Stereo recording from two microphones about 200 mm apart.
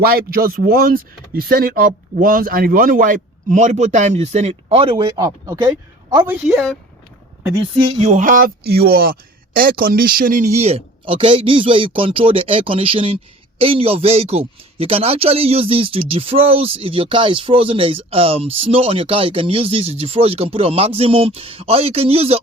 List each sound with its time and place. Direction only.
0.0 s speech: 50° right (ahead or behind); by 6.7 s 5° right (ahead or behind)
7.6 s speech: 35° right (ahead or behind)